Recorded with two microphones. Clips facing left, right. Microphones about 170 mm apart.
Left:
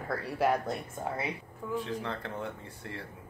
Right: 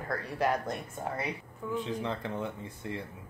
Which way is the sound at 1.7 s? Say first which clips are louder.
Right 1 dB; 20° right (ahead or behind).